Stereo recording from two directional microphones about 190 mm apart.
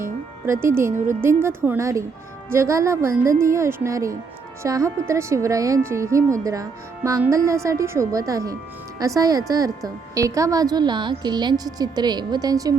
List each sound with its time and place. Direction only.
0.0 s music: 15° right (ahead or behind)
1.4 s a woman's voice: 10° right (ahead or behind)